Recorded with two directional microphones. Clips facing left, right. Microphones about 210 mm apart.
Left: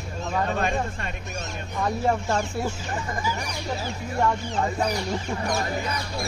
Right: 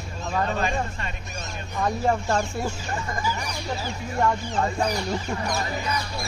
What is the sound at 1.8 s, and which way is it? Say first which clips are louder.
Speech: right 1 dB; 5° left (ahead or behind).